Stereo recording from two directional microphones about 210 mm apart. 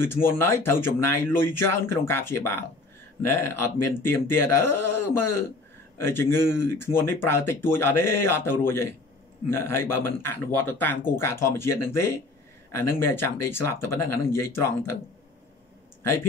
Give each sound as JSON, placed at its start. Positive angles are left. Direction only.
{"t": 0.0, "sound": "speech", "side_deg": 10}
{"t": 10.5, "sound": "speech", "side_deg": 90}
{"t": 11.2, "sound": "speech", "side_deg": 10}